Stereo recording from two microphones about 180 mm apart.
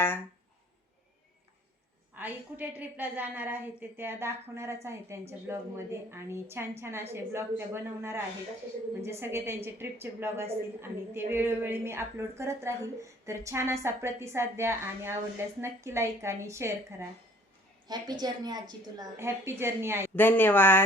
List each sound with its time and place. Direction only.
2.1 s a woman's voice: 10° right (ahead or behind)
20.1 s speech: 10° left (ahead or behind)